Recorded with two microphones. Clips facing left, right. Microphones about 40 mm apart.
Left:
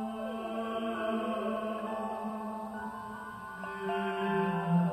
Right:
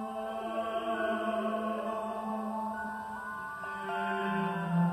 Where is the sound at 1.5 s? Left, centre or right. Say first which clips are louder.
Right 1 dB; right.